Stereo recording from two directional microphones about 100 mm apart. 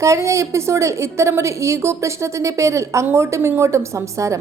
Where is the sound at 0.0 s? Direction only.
30° right (ahead or behind).